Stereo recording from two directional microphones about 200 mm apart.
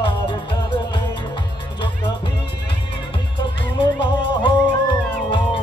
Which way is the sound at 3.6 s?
25° left (ahead or behind).